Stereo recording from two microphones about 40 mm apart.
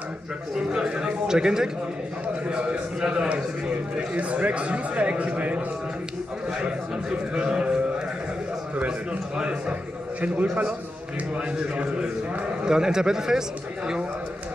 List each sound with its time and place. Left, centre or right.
0.6 s a man's voice: right
6.6 s a man's voice: right
9.4 s a man's voice: right
10.2 s a man's voice: right
11.3 s a man's voice: right
12.6 s a man's voice: centre